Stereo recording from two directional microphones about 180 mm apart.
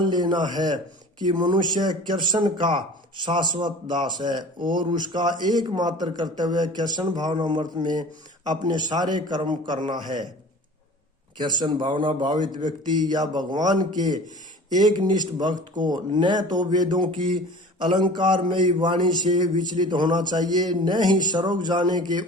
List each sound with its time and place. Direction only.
0.0 s a man's voice: 25° right (ahead or behind)
11.3 s a man's voice: 25° right (ahead or behind)